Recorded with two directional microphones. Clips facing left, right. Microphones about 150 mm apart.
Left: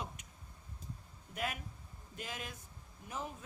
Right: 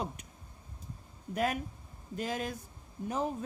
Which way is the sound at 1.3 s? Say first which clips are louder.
Right 9 dB; 40° right (ahead or behind).